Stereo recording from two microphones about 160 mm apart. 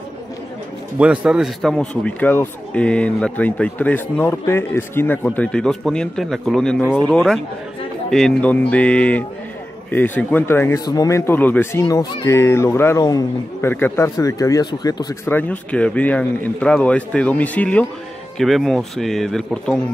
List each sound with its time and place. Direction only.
0.9 s speech: 5° right (ahead or behind); by 15.3 s 25° left (ahead or behind)
15.3 s speech: 10° left (ahead or behind)